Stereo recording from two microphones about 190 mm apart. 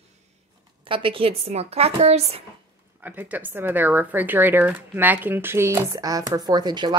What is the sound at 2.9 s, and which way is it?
Speech, 10° right (ahead or behind).